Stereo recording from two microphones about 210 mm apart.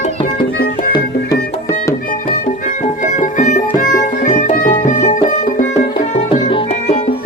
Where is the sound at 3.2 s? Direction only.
35° left (ahead or behind).